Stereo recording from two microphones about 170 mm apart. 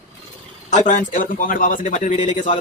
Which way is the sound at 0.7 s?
45° left (ahead or behind).